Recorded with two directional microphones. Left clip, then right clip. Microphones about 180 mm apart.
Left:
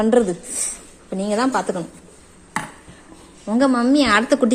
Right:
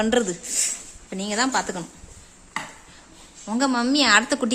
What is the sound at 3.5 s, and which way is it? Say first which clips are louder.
Speech: left 5 dB; 15° right (ahead or behind).